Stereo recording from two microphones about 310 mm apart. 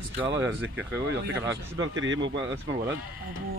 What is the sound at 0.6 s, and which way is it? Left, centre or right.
Speech, centre.